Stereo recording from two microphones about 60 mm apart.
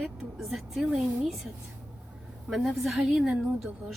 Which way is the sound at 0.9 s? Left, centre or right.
Centre.